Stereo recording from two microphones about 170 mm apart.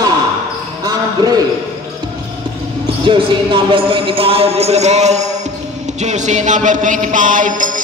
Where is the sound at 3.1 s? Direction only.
30° right (ahead or behind).